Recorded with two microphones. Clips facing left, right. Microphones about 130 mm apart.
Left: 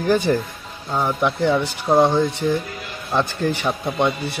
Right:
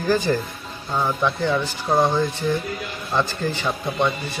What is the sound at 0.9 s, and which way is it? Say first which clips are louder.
Speech: left 2 dB; 10° left (ahead or behind).